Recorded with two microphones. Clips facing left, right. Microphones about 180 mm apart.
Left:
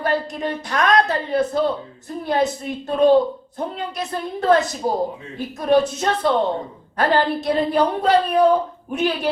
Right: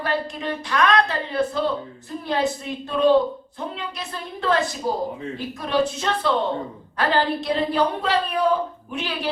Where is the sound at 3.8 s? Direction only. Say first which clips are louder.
Left 6 dB; 45° left (ahead or behind).